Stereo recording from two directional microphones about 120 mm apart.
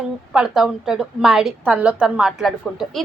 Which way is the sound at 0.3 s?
5° right (ahead or behind).